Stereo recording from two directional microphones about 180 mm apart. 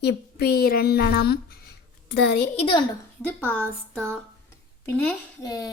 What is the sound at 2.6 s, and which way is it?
Speech, 25° left (ahead or behind).